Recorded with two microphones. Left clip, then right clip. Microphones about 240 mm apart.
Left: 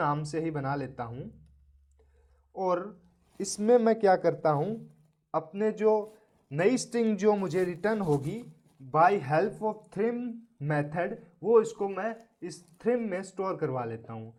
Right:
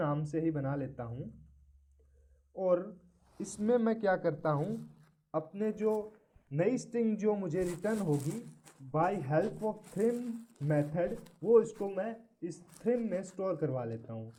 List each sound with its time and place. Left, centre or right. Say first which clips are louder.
0.0 s speech: left 4 dB; left
2.6 s speech: left 1 dB; left